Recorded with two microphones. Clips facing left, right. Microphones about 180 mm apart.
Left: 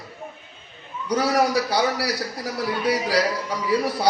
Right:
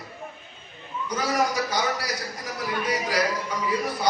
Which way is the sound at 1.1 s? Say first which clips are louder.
Left 5 dB; 70° left (ahead or behind).